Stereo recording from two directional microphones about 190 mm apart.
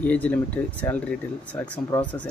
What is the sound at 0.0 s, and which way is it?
Speech, 10° left (ahead or behind).